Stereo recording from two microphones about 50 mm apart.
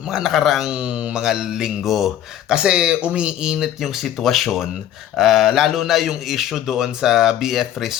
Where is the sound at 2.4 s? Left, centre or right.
Centre.